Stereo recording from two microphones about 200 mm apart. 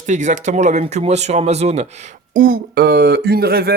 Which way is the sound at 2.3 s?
45° right (ahead or behind).